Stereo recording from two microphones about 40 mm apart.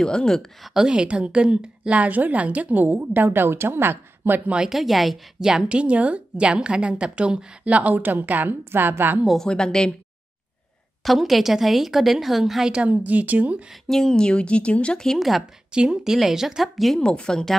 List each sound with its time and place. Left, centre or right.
0.0 s a woman's voice: centre
0.7 s a woman's voice: centre; by 3.0 s right
3.0 s a woman's voice: right
4.6 s a woman's voice: centre
5.4 s speech: centre
5.7 s a woman's voice: right
7.6 s a woman's voice: right
9.4 s a woman's voice: centre
11.1 s a woman's voice: centre
12.8 s a woman's voice: right
13.8 s speech: centre
15.1 s a woman's voice: centre
15.9 s speech: centre
17.0 s speech: left